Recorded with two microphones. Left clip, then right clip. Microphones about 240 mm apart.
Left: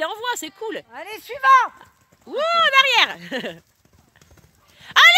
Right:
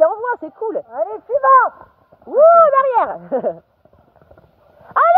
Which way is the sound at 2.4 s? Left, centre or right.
Left.